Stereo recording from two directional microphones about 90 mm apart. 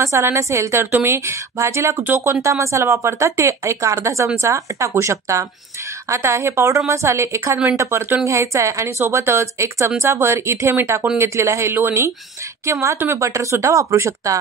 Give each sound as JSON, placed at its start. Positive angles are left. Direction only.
{"t": 0.0, "sound": "a woman's voice", "side_deg": -30}